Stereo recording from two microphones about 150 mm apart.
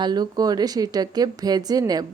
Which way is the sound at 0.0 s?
25° right (ahead or behind).